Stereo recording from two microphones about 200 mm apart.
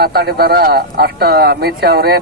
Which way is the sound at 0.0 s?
55° right (ahead or behind).